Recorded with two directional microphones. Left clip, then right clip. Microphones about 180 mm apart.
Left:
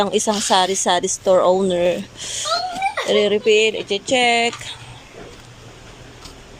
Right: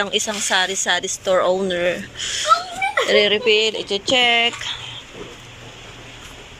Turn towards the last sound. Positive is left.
turn(degrees=20)  # may be behind; listen again after turning